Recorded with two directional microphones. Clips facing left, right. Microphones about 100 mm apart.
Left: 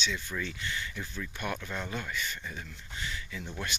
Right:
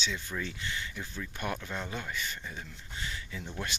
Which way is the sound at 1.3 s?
30° right (ahead or behind).